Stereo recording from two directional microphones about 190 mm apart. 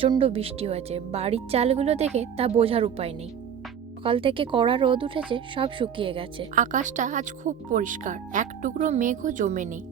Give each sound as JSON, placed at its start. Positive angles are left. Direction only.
{"t": 0.0, "sound": "speech", "side_deg": -30}
{"t": 6.6, "sound": "speech", "side_deg": -40}